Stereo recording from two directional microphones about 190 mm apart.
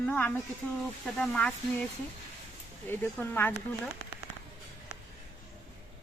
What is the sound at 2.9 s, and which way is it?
Speech, 10° left (ahead or behind).